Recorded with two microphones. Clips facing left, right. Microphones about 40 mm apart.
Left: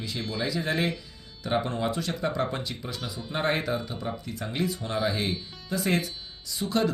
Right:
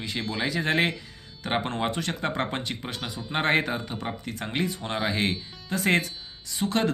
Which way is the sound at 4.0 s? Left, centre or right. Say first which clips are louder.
Right 1 dB; right.